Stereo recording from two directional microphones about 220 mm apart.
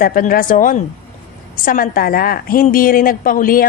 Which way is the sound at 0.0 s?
40° left (ahead or behind).